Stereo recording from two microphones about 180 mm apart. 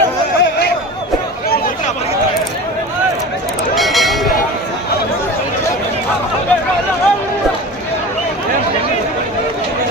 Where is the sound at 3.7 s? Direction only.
Centre (ahead or behind).